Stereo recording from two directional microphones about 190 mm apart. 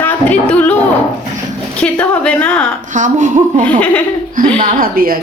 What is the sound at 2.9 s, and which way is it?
Speech, 40° right (ahead or behind).